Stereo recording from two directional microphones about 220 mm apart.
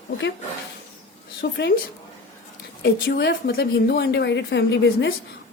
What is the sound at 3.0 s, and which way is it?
Speech, 45° left (ahead or behind).